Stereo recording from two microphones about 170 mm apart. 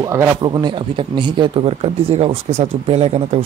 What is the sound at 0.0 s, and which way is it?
Speech, 20° right (ahead or behind).